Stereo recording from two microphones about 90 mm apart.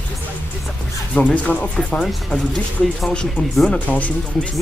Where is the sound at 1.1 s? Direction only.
15° left (ahead or behind).